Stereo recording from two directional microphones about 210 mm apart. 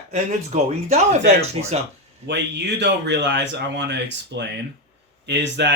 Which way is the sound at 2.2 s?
55° right (ahead or behind).